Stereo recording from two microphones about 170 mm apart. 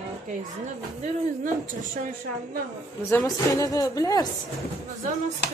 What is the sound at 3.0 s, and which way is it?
A woman's voice, 15° left (ahead or behind).